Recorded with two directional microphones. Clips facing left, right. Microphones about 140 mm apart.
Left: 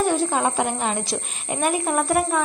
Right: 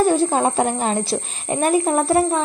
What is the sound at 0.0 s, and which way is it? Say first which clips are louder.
A woman's voice: right 4 dB; 35° right (ahead or behind).